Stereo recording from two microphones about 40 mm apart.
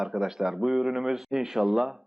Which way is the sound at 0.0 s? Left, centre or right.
Centre.